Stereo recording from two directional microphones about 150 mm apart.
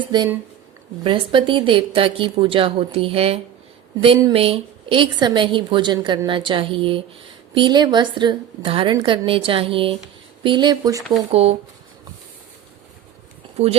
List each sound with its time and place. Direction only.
0.1 s a woman's voice: 30° right (ahead or behind)
11.3 s speech: 40° right (ahead or behind)
13.6 s speech: 40° right (ahead or behind)